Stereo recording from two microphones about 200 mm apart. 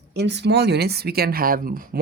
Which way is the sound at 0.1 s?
60° right (ahead or behind).